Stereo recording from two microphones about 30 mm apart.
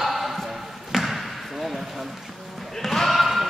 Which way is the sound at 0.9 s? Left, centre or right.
Centre.